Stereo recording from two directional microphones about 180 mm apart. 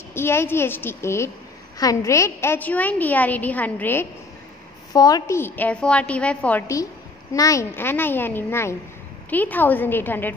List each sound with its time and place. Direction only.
0.1 s a woman's voice: 15° left (ahead or behind)
7.3 s a woman's voice: 20° left (ahead or behind)